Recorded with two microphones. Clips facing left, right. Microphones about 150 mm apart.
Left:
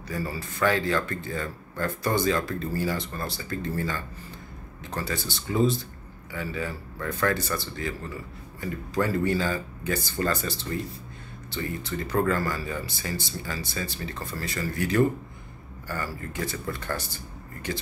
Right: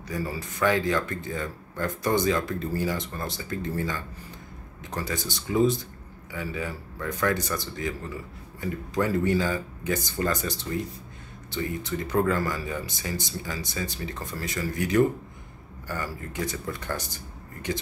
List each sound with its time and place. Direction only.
0.1 s speech: 15° right (ahead or behind)